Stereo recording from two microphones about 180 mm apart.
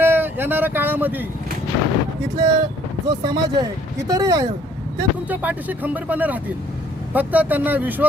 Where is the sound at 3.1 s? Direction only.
20° right (ahead or behind).